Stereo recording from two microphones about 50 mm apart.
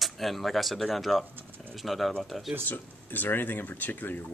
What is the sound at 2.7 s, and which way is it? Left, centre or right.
Speech, left.